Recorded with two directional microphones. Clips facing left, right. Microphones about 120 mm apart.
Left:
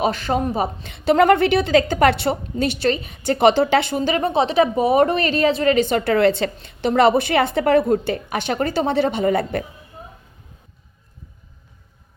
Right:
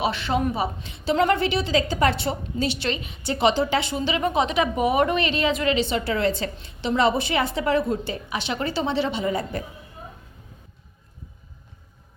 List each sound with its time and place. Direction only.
0.0 s a woman's voice: 40° left (ahead or behind)
0.9 s a woman's voice: 60° left (ahead or behind)
4.2 s a woman's voice: 30° left (ahead or behind)
5.7 s a woman's voice: 50° left (ahead or behind)